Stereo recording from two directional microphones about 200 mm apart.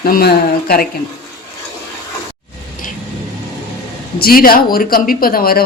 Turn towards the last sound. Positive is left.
turn(degrees=45)  # may be behind; listen again after turning